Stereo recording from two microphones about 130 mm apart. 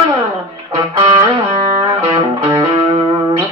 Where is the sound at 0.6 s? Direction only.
35° right (ahead or behind).